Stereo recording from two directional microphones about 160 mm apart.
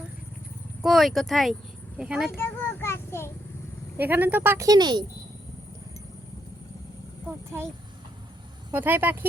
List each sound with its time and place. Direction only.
0.8 s speech: centre (ahead or behind)
2.4 s a child's voice: 15° left (ahead or behind)
3.9 s speech: 10° right (ahead or behind); by 5.0 s 25° right (ahead or behind)
7.3 s speech: 15° right (ahead or behind)
8.7 s speech: 10° right (ahead or behind)